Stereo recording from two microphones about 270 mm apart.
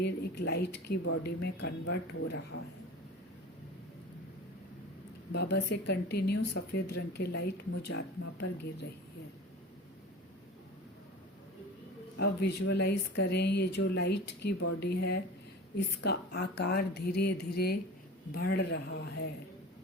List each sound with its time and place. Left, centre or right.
0.0 s speech: left
5.3 s speech: left
12.1 s speech: left